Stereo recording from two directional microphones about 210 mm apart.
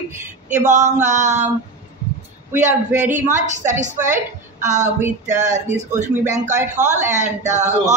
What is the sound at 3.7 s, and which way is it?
A woman's voice, 35° right (ahead or behind).